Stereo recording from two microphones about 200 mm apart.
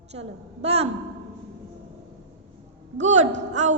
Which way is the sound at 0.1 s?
30° right (ahead or behind).